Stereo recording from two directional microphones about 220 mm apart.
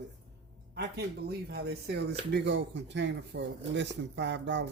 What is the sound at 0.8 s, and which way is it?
Speech, 45° right (ahead or behind).